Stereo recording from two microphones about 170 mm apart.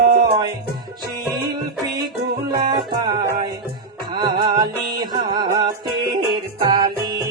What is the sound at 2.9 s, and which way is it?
Music, 25° right (ahead or behind).